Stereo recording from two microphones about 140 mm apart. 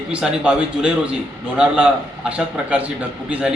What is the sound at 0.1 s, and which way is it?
A man's voice, 5° right (ahead or behind).